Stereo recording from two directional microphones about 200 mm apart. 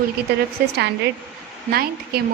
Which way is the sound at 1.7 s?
50° right (ahead or behind).